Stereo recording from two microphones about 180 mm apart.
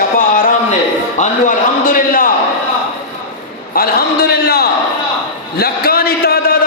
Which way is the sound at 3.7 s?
55° left (ahead or behind).